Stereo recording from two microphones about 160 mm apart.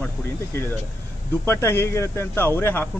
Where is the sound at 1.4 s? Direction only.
15° left (ahead or behind).